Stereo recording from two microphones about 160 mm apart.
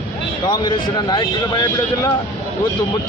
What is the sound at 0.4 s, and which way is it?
Speech, 25° left (ahead or behind).